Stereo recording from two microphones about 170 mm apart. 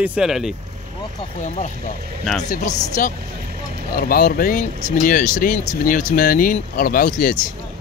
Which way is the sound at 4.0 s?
60° left (ahead or behind).